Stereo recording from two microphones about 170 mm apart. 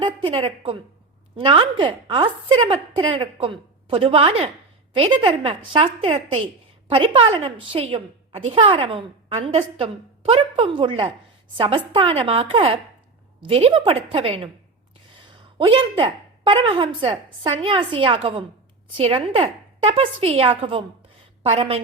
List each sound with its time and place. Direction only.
0.0 s a woman's voice: 30° right (ahead or behind)